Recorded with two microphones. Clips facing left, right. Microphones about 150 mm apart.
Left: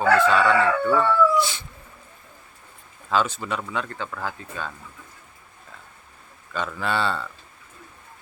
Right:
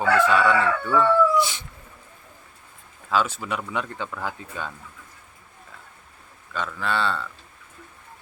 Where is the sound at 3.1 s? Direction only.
5° right (ahead or behind).